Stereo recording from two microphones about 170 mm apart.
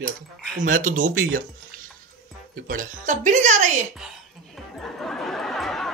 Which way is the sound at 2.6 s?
50° right (ahead or behind).